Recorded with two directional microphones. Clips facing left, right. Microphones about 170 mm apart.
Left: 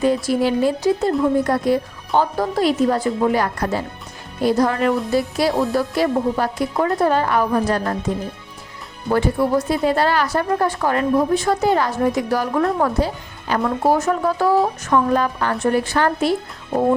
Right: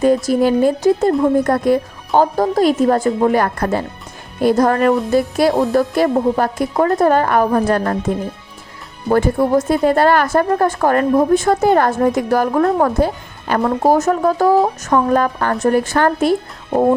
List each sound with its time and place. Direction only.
0.0 s speech: 45° right (ahead or behind)
9.0 s speech: 45° right (ahead or behind)